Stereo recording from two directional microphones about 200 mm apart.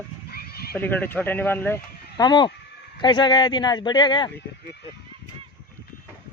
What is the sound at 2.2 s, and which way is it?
Speech, 20° left (ahead or behind).